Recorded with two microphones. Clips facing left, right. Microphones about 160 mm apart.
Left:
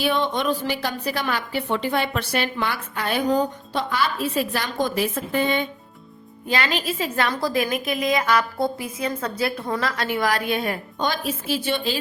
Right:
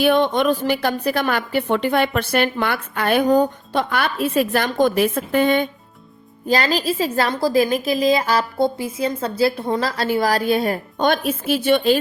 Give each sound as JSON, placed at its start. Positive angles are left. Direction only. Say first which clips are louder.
{"t": 0.0, "sound": "a woman's voice", "louder": "right 6 dB", "side_deg": -55}
{"t": 6.5, "sound": "a woman's voice", "louder": "right 5 dB", "side_deg": -35}
{"t": 10.9, "sound": "a woman's voice", "louder": "right 8 dB", "side_deg": -55}